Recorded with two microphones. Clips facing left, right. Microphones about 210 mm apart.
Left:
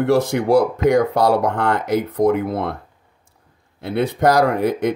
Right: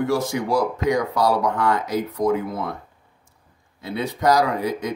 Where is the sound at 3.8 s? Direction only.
60° left (ahead or behind).